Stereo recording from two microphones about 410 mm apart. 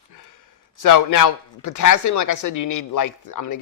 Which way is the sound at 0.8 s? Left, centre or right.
Left.